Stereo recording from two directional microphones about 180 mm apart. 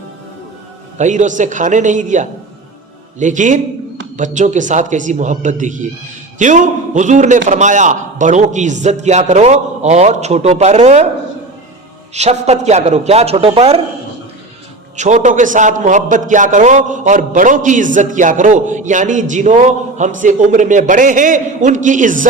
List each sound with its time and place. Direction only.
0.9 s a man's voice: 45° right (ahead or behind)
12.1 s a man's voice: 40° right (ahead or behind)
14.9 s a man's voice: 40° right (ahead or behind)